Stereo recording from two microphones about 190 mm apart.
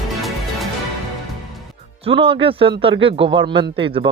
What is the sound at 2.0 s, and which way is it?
Speech, 30° right (ahead or behind).